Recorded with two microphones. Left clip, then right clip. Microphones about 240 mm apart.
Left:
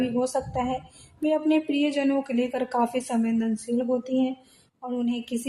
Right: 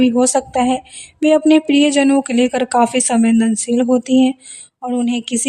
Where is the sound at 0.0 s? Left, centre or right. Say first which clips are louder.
Right 11 dB; right.